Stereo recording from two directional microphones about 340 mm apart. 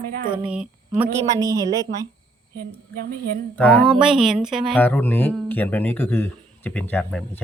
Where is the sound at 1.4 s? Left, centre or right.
Centre.